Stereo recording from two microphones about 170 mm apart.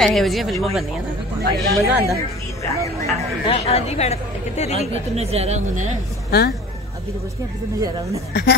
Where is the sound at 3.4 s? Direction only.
35° left (ahead or behind).